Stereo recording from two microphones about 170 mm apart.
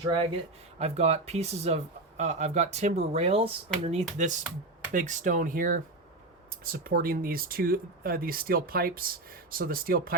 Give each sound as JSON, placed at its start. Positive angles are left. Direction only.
{"t": 0.0, "sound": "speech", "side_deg": -30}
{"t": 4.9, "sound": "speech", "side_deg": -50}